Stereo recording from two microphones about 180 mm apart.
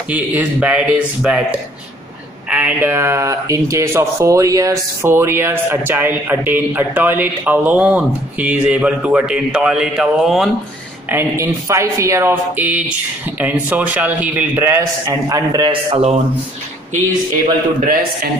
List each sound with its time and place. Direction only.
0.1 s speech: 10° right (ahead or behind)
2.5 s speech: 10° right (ahead or behind)
11.1 s speech: 15° right (ahead or behind); by 16.2 s 35° right (ahead or behind)
17.8 s a man's voice: 55° right (ahead or behind)